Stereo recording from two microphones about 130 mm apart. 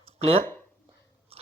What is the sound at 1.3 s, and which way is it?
Biting, 50° right (ahead or behind).